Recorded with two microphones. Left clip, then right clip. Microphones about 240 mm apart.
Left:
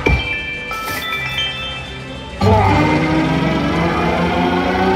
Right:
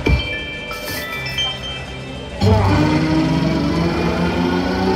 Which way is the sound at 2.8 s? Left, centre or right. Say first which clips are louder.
Left 2 dB; centre.